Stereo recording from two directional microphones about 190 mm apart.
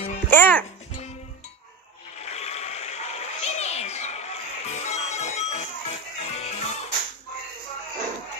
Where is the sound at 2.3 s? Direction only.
35° left (ahead or behind).